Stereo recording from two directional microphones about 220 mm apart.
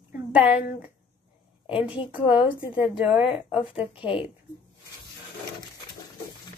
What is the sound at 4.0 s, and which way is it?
Speech, 25° left (ahead or behind).